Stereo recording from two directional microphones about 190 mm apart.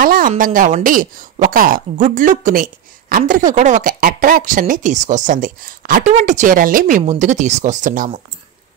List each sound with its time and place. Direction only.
0.0 s speech: 45° right (ahead or behind)